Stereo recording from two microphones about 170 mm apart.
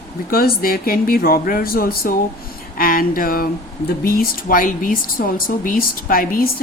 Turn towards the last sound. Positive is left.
turn(degrees=55)  # may be behind; listen again after turning